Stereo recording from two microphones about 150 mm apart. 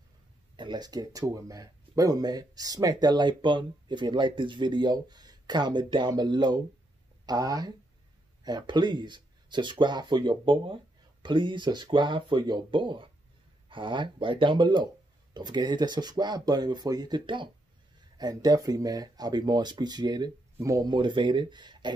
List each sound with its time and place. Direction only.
0.6 s speech: 30° right (ahead or behind)